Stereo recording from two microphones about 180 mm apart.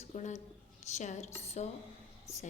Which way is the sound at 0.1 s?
40° left (ahead or behind).